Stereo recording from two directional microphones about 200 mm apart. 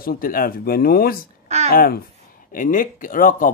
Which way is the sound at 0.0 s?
45° left (ahead or behind).